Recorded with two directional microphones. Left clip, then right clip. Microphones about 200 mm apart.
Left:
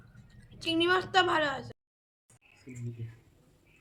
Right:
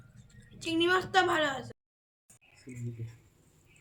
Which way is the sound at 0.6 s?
10° left (ahead or behind).